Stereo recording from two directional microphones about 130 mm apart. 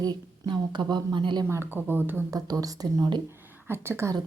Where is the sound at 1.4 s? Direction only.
15° right (ahead or behind).